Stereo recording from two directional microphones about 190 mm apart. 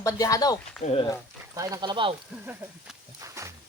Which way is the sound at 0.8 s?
35° left (ahead or behind).